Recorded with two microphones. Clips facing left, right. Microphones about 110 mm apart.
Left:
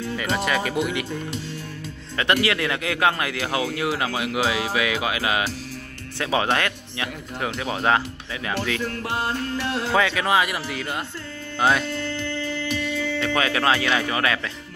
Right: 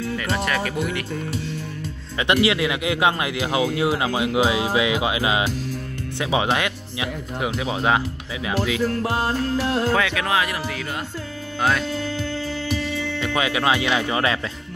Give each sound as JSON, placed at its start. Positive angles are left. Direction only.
{"t": 0.0, "sound": "speech", "side_deg": 5}
{"t": 2.4, "sound": "speech", "side_deg": -15}
{"t": 8.8, "sound": "music", "side_deg": -40}
{"t": 9.8, "sound": "speech", "side_deg": -5}
{"t": 12.0, "sound": "music", "side_deg": -5}
{"t": 13.2, "sound": "speech", "side_deg": -15}